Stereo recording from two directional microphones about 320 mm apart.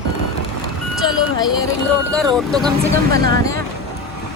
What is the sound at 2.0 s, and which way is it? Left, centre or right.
Speech, centre.